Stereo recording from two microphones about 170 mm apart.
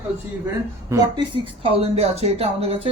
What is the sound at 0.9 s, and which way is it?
Speech, 25° right (ahead or behind).